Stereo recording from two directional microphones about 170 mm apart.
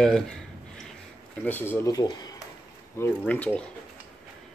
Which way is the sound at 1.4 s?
10° left (ahead or behind).